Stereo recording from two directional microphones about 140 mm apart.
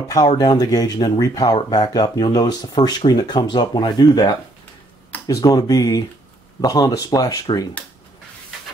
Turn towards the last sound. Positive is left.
turn(degrees=30)  # may be behind; listen again after turning